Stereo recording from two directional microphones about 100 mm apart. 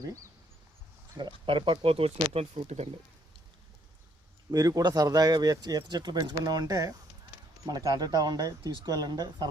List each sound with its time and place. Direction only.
0.0 s speech: 35° right (ahead or behind)
1.5 s speech: 60° right (ahead or behind); by 2.9 s 90° right
4.5 s speech: 40° right (ahead or behind)